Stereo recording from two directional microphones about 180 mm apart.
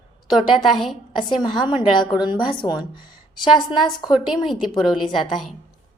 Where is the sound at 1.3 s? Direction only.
25° left (ahead or behind).